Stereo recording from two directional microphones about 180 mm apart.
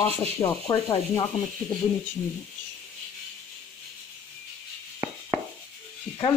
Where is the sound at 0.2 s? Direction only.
15° left (ahead or behind).